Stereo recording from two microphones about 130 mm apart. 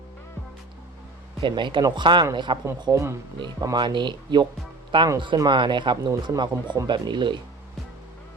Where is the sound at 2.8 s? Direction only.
25° right (ahead or behind).